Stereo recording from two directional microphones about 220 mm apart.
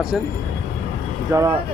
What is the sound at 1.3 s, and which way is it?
Speech, 15° right (ahead or behind).